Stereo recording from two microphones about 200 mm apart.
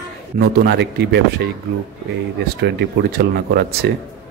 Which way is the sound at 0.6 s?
60° right (ahead or behind).